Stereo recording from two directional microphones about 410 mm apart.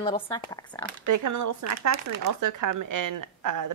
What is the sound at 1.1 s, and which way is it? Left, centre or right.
Speech, right.